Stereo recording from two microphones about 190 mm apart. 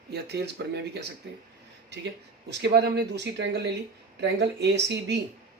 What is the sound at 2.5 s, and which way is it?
Speech, 60° right (ahead or behind).